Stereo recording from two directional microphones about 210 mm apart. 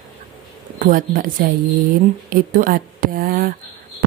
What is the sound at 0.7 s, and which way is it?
Speech, 40° right (ahead or behind).